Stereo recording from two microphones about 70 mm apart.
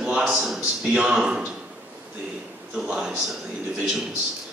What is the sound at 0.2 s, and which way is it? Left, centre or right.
A man's voice, centre.